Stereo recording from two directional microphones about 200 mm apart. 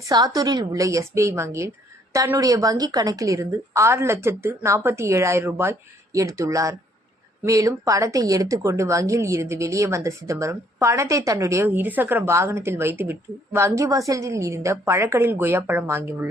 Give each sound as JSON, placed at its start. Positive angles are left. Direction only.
{"t": 0.0, "sound": "speech", "side_deg": -20}